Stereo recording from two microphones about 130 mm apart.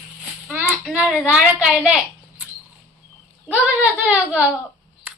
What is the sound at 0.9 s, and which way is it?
Speech, 5° right (ahead or behind).